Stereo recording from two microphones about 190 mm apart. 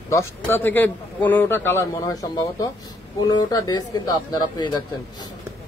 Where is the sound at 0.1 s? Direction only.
15° left (ahead or behind).